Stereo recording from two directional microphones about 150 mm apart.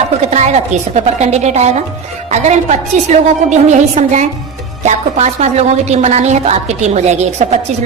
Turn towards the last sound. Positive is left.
turn(degrees=-50)  # may be behind; listen again after turning